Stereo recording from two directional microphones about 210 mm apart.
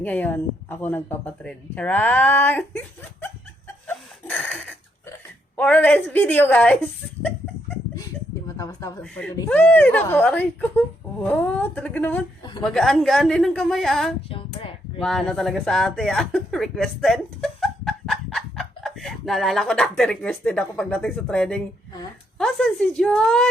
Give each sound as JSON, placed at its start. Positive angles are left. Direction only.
{"t": 0.0, "sound": "speech", "side_deg": 10}
{"t": 3.8, "sound": "a sound", "side_deg": 5}
{"t": 5.5, "sound": "speech", "side_deg": 5}
{"t": 8.4, "sound": "a woman's voice", "side_deg": 15}
{"t": 14.3, "sound": "a sound", "side_deg": 25}
{"t": 15.0, "sound": "a woman's voice", "side_deg": 0}